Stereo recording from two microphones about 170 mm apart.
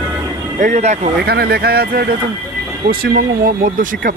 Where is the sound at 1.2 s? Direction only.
65° right (ahead or behind).